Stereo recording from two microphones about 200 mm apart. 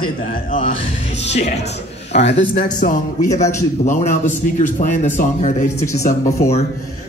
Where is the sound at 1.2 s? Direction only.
35° left (ahead or behind).